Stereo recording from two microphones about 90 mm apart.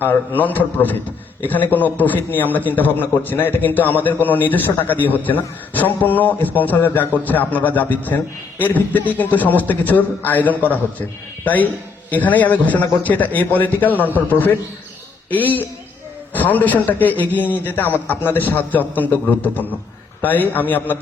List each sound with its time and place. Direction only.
0.0 s a man's voice: 20° left (ahead or behind)